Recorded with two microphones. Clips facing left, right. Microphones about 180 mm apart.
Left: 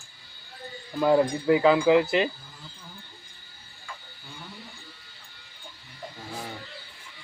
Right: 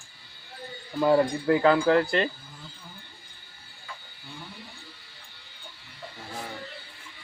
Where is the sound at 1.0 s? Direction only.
Centre (ahead or behind).